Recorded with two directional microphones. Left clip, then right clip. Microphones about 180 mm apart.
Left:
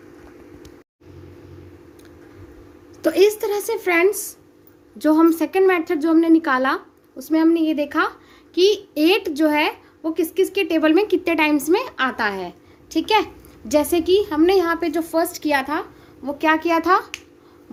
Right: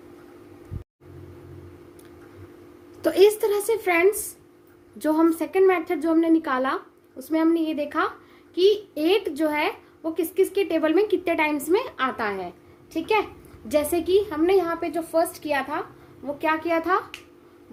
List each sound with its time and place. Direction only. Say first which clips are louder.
3.0 s speech: left 1 dB; 10° left (ahead or behind)
3.8 s a woman's voice: left 4 dB; 30° left (ahead or behind)
5.2 s a woman's voice: left 1 dB; 35° left (ahead or behind)
12.9 s a woman's voice: left 5 dB; 55° left (ahead or behind)
13.7 s a woman's voice: left 5 dB; 35° left (ahead or behind); by 15.8 s 55° left (ahead or behind)
16.2 s a child's voice: left 6 dB; 65° left (ahead or behind)